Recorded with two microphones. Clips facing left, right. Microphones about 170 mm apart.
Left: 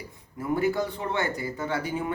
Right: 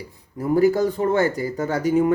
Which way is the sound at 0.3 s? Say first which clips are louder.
Right 8 dB; 40° right (ahead or behind).